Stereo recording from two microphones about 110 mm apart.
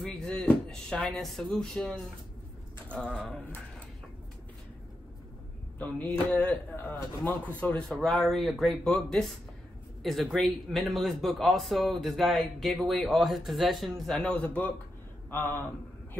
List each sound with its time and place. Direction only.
0.0 s speech: 5° left (ahead or behind)
6.0 s a man's voice: 10° left (ahead or behind)